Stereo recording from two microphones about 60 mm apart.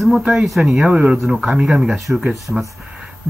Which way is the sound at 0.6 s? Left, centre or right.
Centre.